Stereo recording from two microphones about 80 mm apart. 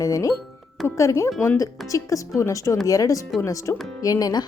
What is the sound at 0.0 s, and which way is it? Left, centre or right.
A woman's voice, left.